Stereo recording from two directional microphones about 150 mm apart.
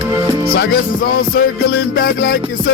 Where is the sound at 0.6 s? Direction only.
85° left.